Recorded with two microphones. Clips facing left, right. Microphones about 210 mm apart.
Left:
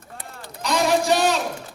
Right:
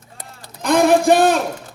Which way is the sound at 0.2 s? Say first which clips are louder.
Right 1 dB; 55° right (ahead or behind).